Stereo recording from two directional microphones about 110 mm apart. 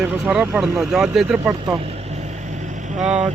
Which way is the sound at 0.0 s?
5° right (ahead or behind).